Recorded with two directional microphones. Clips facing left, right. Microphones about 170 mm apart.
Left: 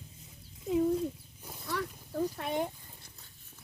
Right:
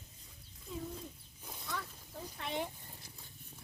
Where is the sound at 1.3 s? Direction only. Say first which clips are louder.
Left 3 dB; 5° left (ahead or behind).